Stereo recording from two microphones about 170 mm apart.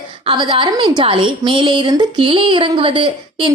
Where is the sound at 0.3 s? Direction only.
30° right (ahead or behind).